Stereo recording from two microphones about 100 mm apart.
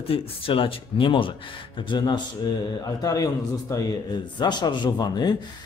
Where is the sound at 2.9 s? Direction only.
35° left (ahead or behind).